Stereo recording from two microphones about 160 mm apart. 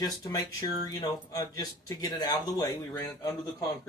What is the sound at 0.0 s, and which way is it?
Speech, 25° left (ahead or behind).